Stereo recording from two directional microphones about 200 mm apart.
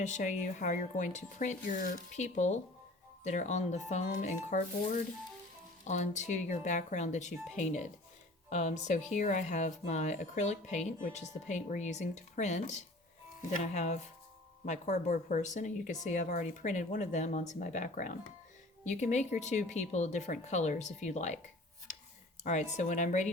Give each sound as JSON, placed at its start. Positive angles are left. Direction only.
{"t": 0.0, "sound": "speech", "side_deg": 35}
{"t": 22.4, "sound": "speech", "side_deg": 35}